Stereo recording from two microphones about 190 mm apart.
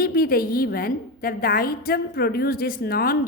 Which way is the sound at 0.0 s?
50° left (ahead or behind).